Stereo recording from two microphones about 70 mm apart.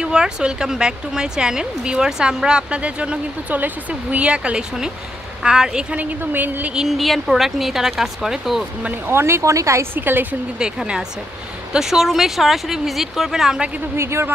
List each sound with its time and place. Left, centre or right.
0.0 s speech: centre
6.7 s speech: centre
9.1 s speech: right
9.9 s a woman's voice: right
10.6 s speech: centre
13.9 s speech: right